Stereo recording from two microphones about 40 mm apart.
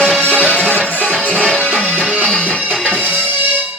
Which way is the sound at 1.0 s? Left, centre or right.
Right.